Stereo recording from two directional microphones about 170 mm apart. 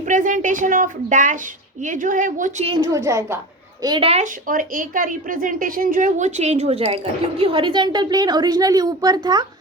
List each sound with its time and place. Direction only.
0.0 s a woman's voice: 50° right (ahead or behind)
2.6 s a woman's voice: 20° right (ahead or behind)
4.1 s speech: 50° right (ahead or behind); by 9.5 s 25° right (ahead or behind)